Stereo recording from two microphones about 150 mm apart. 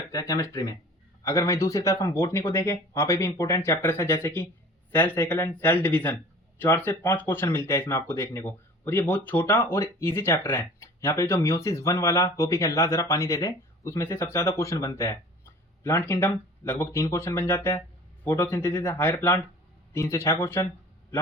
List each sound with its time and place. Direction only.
0.1 s speech: 20° left (ahead or behind)